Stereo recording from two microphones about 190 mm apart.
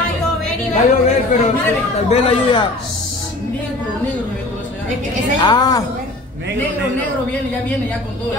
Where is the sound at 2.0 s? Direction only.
30° left (ahead or behind).